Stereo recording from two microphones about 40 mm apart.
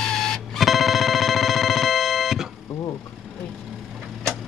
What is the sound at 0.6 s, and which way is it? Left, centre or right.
Music, centre.